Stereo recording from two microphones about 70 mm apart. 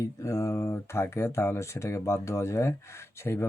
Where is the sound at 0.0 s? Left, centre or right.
Left.